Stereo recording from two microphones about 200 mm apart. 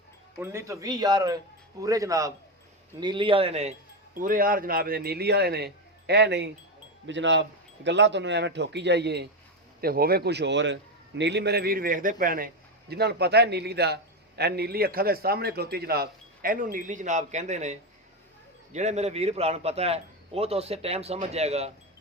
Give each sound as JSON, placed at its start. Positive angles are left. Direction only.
{"t": 0.3, "sound": "a man's voice", "side_deg": -10}
{"t": 4.1, "sound": "a man's voice", "side_deg": -45}
{"t": 12.9, "sound": "a man's voice", "side_deg": -55}